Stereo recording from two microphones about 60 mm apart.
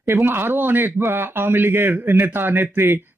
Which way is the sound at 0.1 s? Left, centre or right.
Right.